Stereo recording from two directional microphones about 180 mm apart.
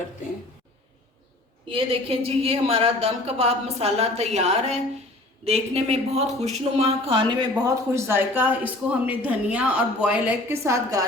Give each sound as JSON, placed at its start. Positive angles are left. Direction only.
{"t": 1.6, "sound": "speech", "side_deg": -30}
{"t": 7.6, "sound": "speech", "side_deg": -15}